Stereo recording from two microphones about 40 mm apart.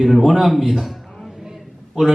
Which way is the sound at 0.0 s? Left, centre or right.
Centre.